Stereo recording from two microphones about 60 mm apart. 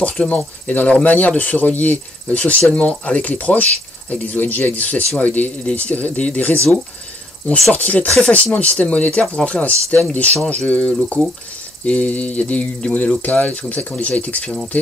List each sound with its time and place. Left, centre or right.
0.0 s speech: left
7.7 s speech: left